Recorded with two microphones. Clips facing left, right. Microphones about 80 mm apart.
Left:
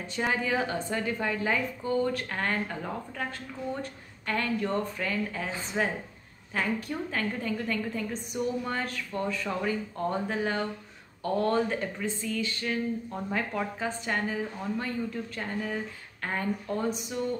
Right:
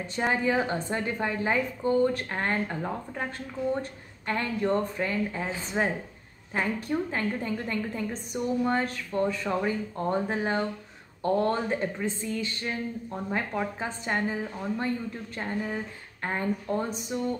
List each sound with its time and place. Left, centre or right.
0.1 s a woman's voice: right
13.3 s speech: centre
13.7 s a woman's voice: right